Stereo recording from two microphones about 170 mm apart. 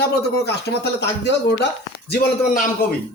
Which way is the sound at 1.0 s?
90° left.